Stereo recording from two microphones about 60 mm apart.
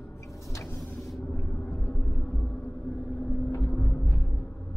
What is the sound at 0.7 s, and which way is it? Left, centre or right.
Vehicle, left.